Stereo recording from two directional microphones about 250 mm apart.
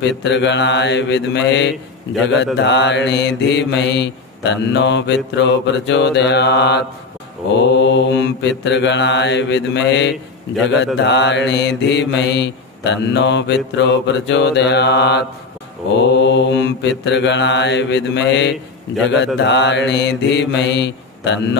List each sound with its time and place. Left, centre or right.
0.0 s mantra: left